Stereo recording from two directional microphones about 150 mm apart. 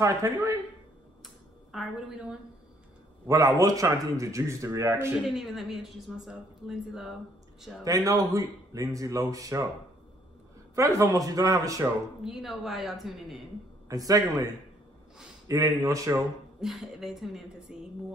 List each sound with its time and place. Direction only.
0.0 s a man's voice: 20° right (ahead or behind)
1.7 s a woman's voice: centre (ahead or behind)
3.3 s a man's voice: 20° right (ahead or behind)
5.3 s a woman's voice: centre (ahead or behind)
7.8 s a man's voice: 25° right (ahead or behind)
10.7 s a man's voice: 20° right (ahead or behind)
12.2 s a woman's voice: centre (ahead or behind)
13.8 s a man's voice: 25° right (ahead or behind)
16.6 s a woman's voice: centre (ahead or behind)